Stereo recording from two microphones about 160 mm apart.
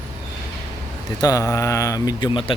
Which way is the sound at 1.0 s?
25° left (ahead or behind).